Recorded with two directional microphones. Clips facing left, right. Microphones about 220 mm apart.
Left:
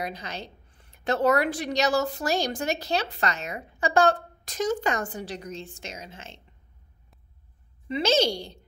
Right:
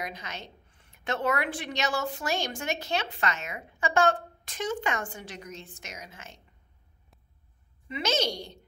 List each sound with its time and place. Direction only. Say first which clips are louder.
0.0 s a woman's voice: left 4 dB; 35° left (ahead or behind)
7.9 s a woman's voice: left 6 dB; 30° left (ahead or behind)